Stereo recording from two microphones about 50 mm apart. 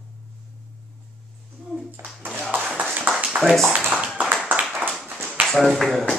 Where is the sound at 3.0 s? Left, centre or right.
Centre.